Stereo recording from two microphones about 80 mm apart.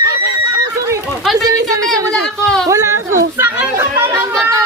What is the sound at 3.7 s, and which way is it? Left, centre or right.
Chatter, right.